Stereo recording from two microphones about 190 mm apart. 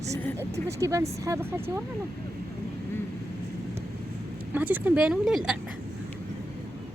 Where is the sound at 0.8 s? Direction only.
15° right (ahead or behind).